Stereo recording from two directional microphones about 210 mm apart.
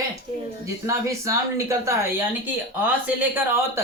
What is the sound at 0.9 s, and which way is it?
Speech, 15° right (ahead or behind).